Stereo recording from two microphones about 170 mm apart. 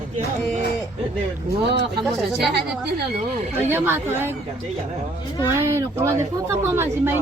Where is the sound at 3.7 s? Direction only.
15° right (ahead or behind).